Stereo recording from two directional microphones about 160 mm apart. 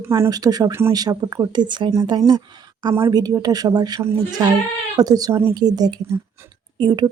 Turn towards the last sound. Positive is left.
turn(degrees=-25)  # may be behind; listen again after turning